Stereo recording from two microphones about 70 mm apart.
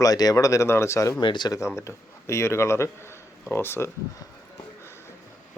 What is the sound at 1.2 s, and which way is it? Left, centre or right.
Speech, left.